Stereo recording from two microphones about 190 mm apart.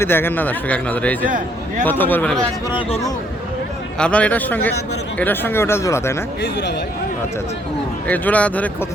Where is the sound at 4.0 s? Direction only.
5° left (ahead or behind).